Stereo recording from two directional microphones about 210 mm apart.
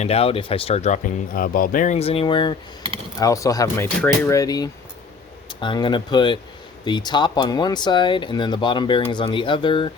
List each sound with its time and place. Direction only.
0.0 s speech: 30° left (ahead or behind)